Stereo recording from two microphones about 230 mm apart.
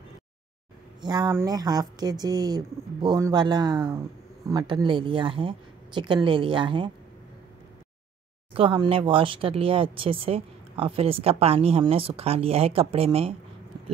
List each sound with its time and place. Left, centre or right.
1.0 s speech: centre
8.5 s speech: right